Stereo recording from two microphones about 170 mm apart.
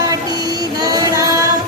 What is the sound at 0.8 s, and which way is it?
Child singing, 20° right (ahead or behind).